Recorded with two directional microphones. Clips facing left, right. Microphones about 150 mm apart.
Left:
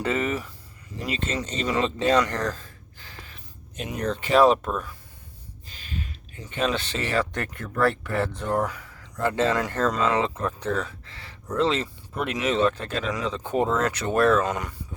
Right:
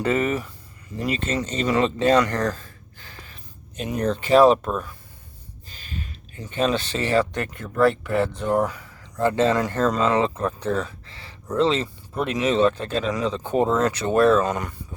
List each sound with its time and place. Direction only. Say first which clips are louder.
0.0 s speech: right 4 dB; 45° right (ahead or behind)
3.0 s speech: right 1 dB; 45° right (ahead or behind); by 7.3 s 30° right (ahead or behind)
7.3 s speech: right 4 dB; 15° right (ahead or behind)
8.6 s speech: right 3 dB; 30° right (ahead or behind)
14.4 s speech: right 2 dB; 45° right (ahead or behind)